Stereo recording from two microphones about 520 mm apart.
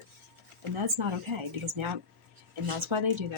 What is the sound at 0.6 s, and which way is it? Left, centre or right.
Speech, right.